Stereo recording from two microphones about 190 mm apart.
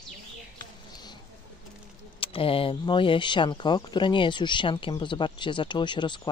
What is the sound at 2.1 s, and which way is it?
Speech, 30° left (ahead or behind).